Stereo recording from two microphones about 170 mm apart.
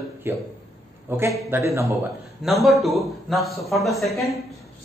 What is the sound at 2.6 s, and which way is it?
A man's voice, centre (ahead or behind).